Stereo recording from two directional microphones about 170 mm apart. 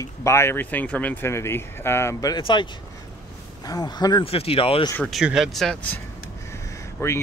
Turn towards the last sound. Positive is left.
turn(degrees=15)  # may be behind; listen again after turning